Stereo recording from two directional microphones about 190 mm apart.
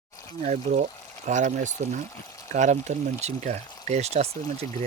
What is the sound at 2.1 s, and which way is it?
Speech, 15° left (ahead or behind).